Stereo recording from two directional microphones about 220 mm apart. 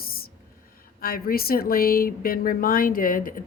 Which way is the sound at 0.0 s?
40° left (ahead or behind).